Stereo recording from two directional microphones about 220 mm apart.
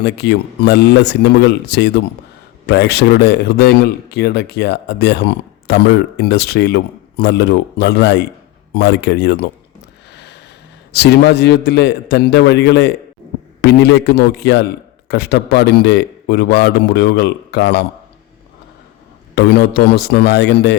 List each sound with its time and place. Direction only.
0.0 s a man's voice: 50° left (ahead or behind)
10.1 s a sound: 50° left (ahead or behind)
10.9 s a man's voice: 50° left (ahead or behind)
19.4 s a man's voice: 45° left (ahead or behind)